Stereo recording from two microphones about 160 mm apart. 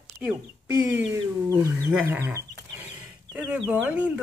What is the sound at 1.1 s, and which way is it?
Wild animals, 20° right (ahead or behind).